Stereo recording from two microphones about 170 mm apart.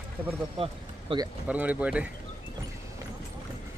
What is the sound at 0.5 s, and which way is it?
Speech, 30° right (ahead or behind).